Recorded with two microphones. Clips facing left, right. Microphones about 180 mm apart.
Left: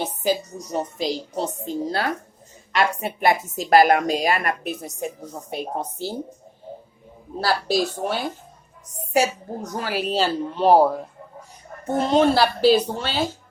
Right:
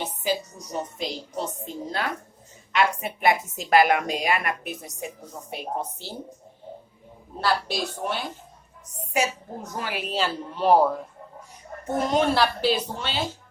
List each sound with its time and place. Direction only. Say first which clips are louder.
0.2 s a woman's voice: left 4 dB; 40° left (ahead or behind)
7.4 s a woman's voice: left 4 dB; 40° left (ahead or behind)
11.9 s a woman's voice: left 4 dB; 30° left (ahead or behind)